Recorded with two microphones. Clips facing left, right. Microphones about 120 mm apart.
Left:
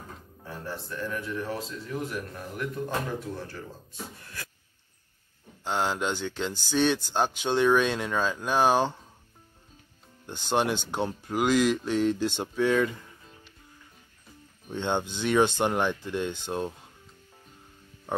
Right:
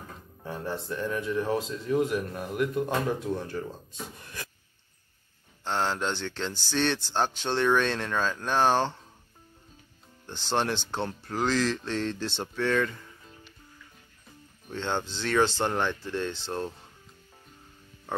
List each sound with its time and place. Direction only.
0.5 s speech: 20° right (ahead or behind)
5.6 s speech: 10° left (ahead or behind)
10.2 s speech: 10° left (ahead or behind)
14.7 s speech: 15° left (ahead or behind)